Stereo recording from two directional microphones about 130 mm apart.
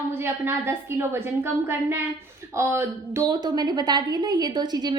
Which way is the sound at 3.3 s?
30° right (ahead or behind).